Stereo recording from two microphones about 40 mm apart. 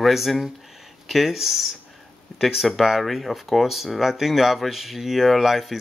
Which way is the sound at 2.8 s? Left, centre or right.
Centre.